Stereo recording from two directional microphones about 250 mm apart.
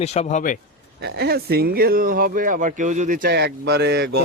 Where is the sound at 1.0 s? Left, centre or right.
Right.